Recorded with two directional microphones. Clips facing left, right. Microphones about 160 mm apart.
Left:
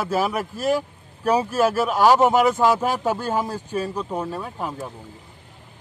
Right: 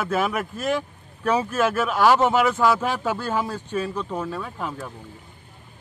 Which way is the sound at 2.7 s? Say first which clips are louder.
Left 2 dB; 40° left (ahead or behind).